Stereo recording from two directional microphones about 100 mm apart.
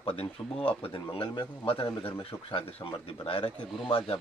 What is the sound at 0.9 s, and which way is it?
Speech, 55° left (ahead or behind).